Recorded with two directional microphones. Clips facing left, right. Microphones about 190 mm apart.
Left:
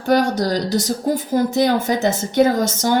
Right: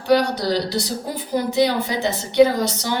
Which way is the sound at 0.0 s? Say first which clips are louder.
Left 1 dB; 45° left (ahead or behind).